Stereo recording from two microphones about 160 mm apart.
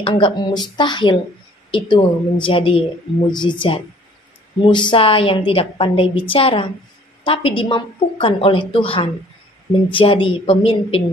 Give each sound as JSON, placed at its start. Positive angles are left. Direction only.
{"t": 0.0, "sound": "a woman's voice", "side_deg": 30}
{"t": 4.6, "sound": "a woman's voice", "side_deg": 30}